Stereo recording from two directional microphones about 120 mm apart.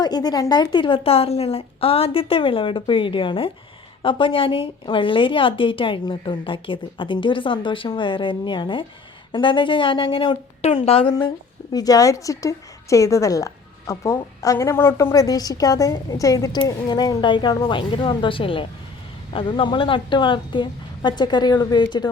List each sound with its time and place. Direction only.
0.0 s a woman's voice: 35° left (ahead or behind); by 11.1 s 50° left (ahead or behind)
11.7 s a woman's voice: 30° left (ahead or behind)